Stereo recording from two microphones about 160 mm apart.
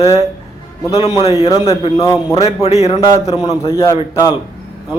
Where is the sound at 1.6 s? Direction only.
35° left (ahead or behind).